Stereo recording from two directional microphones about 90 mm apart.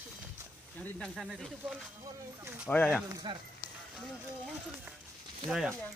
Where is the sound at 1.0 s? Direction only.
Centre (ahead or behind).